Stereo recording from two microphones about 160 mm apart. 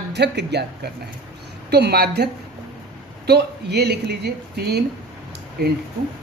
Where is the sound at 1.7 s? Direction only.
85° right.